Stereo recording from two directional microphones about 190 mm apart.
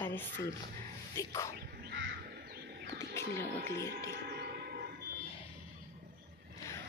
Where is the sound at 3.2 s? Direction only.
15° left (ahead or behind).